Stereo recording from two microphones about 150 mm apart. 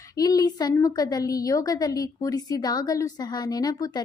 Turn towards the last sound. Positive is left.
turn(degrees=25)  # may be behind; listen again after turning